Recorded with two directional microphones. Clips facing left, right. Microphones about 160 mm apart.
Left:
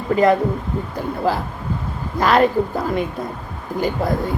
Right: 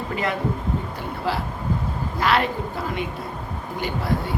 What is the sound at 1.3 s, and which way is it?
A woman's voice, 40° left (ahead or behind).